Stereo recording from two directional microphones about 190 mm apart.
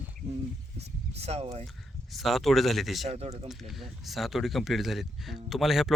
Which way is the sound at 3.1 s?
35° right (ahead or behind).